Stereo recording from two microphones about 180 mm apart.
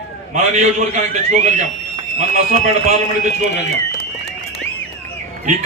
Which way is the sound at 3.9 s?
65° left (ahead or behind).